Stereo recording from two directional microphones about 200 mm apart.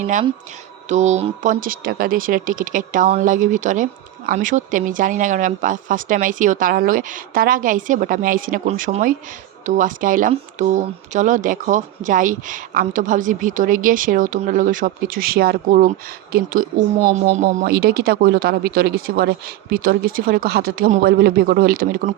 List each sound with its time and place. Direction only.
0.9 s speech: 35° right (ahead or behind)